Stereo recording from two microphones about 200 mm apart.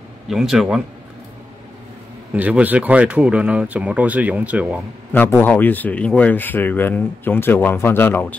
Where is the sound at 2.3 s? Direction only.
10° right (ahead or behind).